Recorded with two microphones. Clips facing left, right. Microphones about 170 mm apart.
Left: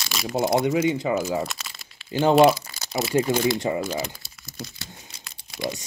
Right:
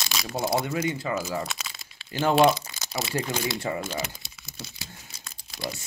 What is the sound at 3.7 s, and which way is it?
Speech, 20° left (ahead or behind).